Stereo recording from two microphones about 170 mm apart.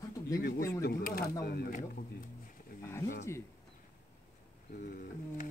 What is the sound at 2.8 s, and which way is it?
Wild animals, 15° left (ahead or behind).